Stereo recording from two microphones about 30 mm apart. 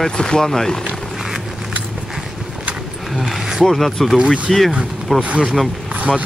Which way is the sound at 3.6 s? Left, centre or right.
Centre.